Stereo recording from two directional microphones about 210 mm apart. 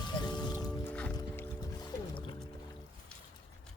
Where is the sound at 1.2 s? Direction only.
10° left (ahead or behind).